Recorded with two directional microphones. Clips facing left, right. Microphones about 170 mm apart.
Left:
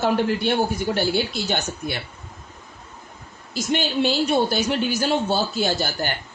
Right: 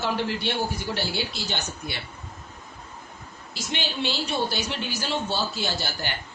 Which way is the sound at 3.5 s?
45° left (ahead or behind).